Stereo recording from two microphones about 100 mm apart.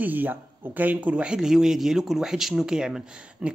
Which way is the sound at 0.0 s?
20° right (ahead or behind).